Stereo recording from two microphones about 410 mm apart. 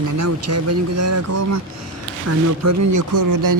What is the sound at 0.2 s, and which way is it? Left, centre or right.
Speech, right.